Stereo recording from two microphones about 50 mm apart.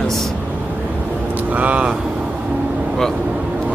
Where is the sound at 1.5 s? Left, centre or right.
Right.